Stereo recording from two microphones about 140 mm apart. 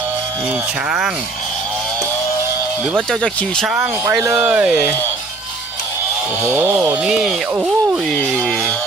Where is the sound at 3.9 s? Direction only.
20° right (ahead or behind).